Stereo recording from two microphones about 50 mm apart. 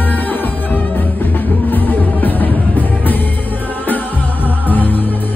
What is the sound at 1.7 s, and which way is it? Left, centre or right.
Music, left.